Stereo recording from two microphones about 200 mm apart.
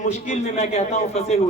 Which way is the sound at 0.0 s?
35° left (ahead or behind).